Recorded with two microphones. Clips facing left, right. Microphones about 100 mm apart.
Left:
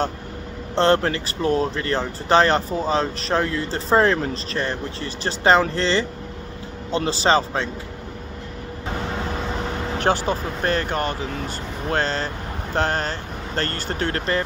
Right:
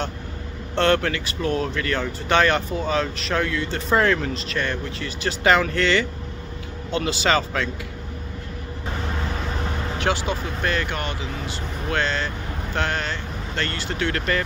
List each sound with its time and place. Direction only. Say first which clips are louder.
0.7 s speech: left 2 dB; 30° left (ahead or behind)
9.9 s speech: left 4 dB; 40° left (ahead or behind)